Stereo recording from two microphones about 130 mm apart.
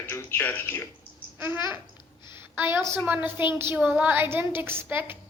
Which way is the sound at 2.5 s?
20° right (ahead or behind).